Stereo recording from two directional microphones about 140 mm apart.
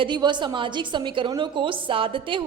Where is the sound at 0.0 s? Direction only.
35° right (ahead or behind).